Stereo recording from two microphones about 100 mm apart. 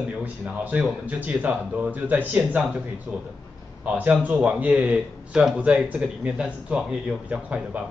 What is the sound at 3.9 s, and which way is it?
A man's voice, 15° right (ahead or behind).